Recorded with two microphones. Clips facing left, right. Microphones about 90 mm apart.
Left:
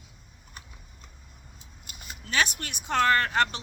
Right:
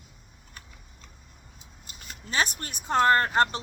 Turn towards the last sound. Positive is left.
turn(degrees=-35)  # may be behind; listen again after turning